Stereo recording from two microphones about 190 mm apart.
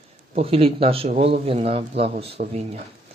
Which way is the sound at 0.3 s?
30° right (ahead or behind).